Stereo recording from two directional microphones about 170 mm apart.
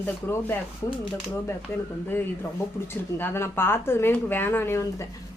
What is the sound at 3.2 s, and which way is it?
Speech, 15° left (ahead or behind).